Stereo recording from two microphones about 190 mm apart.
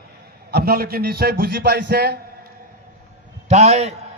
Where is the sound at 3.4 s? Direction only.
35° right (ahead or behind).